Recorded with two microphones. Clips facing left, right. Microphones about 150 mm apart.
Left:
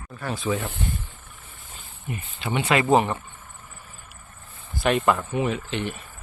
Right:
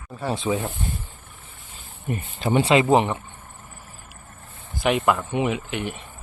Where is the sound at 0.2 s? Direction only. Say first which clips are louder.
Right 2 dB; 25° right (ahead or behind).